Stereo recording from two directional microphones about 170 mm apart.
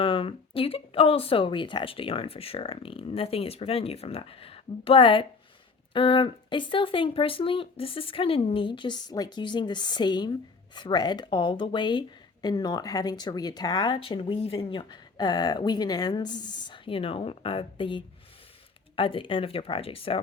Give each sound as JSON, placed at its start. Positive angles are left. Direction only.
{"t": 0.0, "sound": "speech", "side_deg": 30}